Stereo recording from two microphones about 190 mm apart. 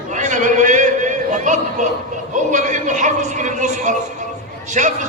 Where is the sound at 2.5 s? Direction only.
40° right (ahead or behind).